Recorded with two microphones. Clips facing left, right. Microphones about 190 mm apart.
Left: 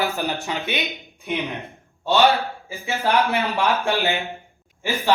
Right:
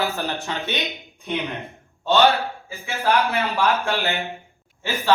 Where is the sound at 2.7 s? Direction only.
15° left (ahead or behind).